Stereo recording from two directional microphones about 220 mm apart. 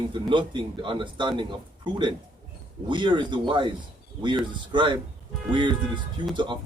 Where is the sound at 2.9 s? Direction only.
20° right (ahead or behind).